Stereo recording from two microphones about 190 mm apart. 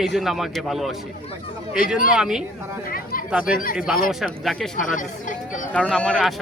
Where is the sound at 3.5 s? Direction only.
50° left (ahead or behind).